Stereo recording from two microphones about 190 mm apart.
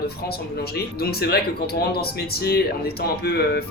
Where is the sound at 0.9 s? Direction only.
55° left (ahead or behind).